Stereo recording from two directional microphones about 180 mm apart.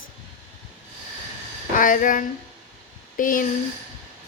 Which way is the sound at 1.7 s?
50° left (ahead or behind).